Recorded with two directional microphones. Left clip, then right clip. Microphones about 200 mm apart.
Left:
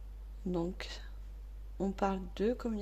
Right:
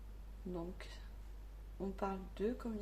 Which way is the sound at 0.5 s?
55° left (ahead or behind).